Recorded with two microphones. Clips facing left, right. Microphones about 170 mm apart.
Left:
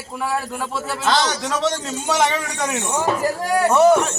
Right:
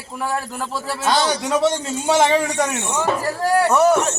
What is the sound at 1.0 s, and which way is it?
A man's voice, 10° right (ahead or behind).